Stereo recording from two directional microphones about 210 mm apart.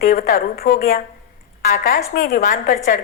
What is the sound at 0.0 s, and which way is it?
A woman's voice, 45° left (ahead or behind).